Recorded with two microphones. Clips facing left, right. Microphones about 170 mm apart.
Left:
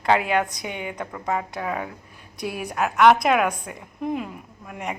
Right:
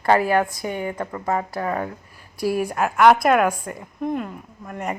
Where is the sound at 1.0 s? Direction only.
5° left (ahead or behind).